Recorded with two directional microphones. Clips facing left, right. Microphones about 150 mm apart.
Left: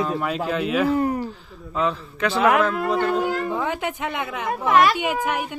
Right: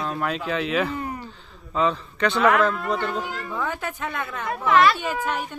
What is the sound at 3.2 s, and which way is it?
Speech, 50° left (ahead or behind).